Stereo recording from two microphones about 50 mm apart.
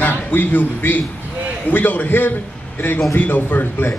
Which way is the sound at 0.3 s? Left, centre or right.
Left.